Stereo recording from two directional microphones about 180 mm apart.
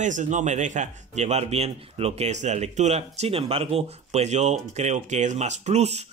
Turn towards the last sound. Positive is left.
turn(degrees=-35)  # may be behind; listen again after turning